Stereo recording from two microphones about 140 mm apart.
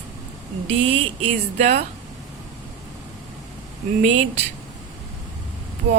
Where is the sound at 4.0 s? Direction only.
55° right (ahead or behind).